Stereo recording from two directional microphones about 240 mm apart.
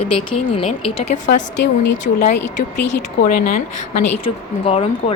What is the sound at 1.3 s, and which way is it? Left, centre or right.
A woman's voice, left.